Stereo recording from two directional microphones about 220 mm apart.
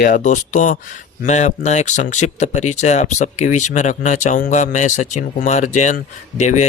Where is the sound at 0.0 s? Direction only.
35° left (ahead or behind).